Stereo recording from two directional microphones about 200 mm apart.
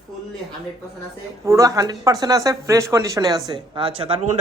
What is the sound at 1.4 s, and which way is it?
Speech, 15° right (ahead or behind).